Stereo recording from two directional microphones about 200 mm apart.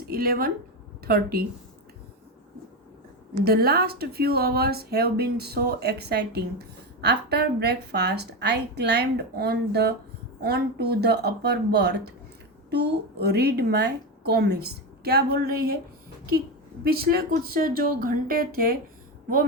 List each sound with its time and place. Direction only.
0.1 s speech: 50° right (ahead or behind)
3.4 s speech: 50° right (ahead or behind)
16.8 s speech: 50° right (ahead or behind)